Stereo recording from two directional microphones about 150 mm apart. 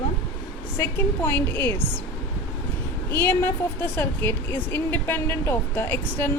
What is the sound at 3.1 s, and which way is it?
A woman's voice, 15° left (ahead or behind).